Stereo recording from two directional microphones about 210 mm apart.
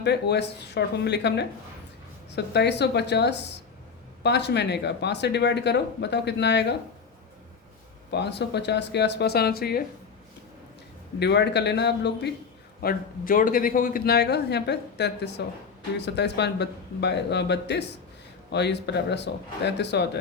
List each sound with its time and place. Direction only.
0.0 s a man's voice: 55° left (ahead or behind)
8.1 s a man's voice: 55° left (ahead or behind)
11.2 s a man's voice: 55° left (ahead or behind)
12.8 s a man's voice: 45° left (ahead or behind)